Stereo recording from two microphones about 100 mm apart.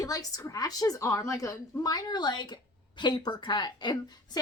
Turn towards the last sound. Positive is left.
turn(degrees=45)  # may be behind; listen again after turning